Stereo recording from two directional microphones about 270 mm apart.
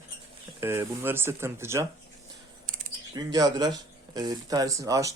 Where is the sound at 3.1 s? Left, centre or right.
Centre.